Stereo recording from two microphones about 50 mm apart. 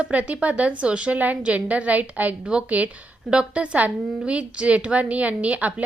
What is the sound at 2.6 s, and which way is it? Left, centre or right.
A woman's voice, right.